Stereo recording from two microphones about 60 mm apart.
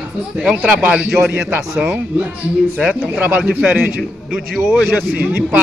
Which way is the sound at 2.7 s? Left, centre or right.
Centre.